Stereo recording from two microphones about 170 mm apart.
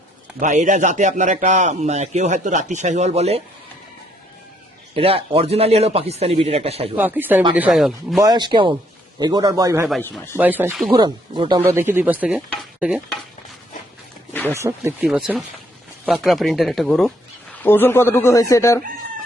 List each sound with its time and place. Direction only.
0.3 s a man's voice: 50° right (ahead or behind)
4.9 s speech: 35° right (ahead or behind)
6.9 s speech: 10° right (ahead or behind)
8.2 s a man's voice: 25° right (ahead or behind)
10.9 s a man's voice: 25° right (ahead or behind)
11.6 s speech: 15° right (ahead or behind)
14.5 s speech: 15° right (ahead or behind)
15.1 s speech: 5° right (ahead or behind)
17.6 s speech: 15° left (ahead or behind)